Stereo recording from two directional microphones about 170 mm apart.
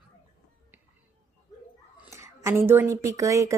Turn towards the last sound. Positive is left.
turn(degrees=-20)  # may be behind; listen again after turning